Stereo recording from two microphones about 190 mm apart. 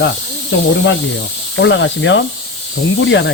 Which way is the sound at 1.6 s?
70° left (ahead or behind).